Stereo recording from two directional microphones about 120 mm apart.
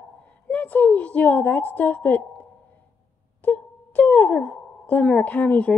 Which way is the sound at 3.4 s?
10° left (ahead or behind).